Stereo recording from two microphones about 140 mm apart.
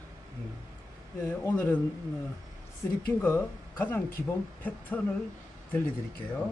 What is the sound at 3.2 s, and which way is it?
Speech, 10° left (ahead or behind).